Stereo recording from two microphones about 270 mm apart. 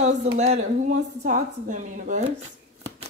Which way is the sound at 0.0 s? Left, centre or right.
Right.